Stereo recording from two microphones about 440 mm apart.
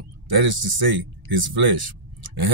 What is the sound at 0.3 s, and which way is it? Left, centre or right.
Speech, right.